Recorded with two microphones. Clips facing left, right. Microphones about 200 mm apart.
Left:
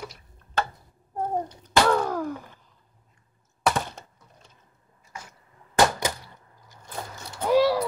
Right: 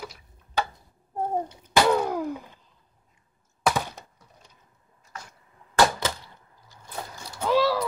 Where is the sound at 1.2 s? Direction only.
15° right (ahead or behind).